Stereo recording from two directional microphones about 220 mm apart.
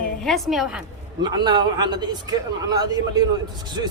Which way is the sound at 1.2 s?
20° right (ahead or behind).